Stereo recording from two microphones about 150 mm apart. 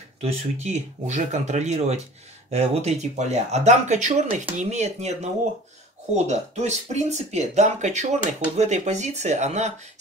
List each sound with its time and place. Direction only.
0.2 s speech: 45° right (ahead or behind)